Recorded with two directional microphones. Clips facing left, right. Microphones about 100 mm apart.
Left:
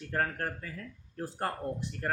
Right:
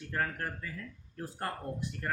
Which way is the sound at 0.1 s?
35° left (ahead or behind).